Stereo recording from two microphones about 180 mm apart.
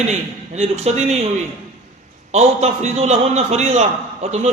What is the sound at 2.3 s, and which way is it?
A man's voice, 35° right (ahead or behind).